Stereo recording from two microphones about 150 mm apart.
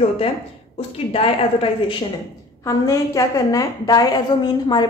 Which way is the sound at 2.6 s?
25° left (ahead or behind).